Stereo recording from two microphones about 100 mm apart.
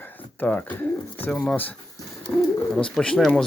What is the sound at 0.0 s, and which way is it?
Speech, 20° left (ahead or behind).